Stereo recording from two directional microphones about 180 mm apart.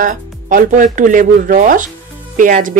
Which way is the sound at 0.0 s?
50° right (ahead or behind).